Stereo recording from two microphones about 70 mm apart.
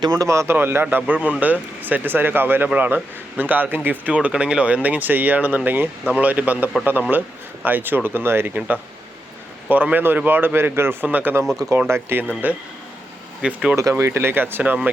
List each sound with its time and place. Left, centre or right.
0.0 s speech: right
0.3 s speech: right
0.5 s speech: right
12.4 s speech: right
14.0 s speech: right